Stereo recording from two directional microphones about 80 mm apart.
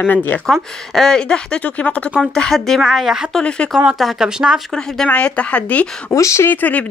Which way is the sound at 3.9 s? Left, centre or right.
Centre.